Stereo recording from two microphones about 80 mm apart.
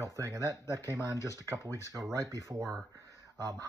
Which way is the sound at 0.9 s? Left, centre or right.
Left.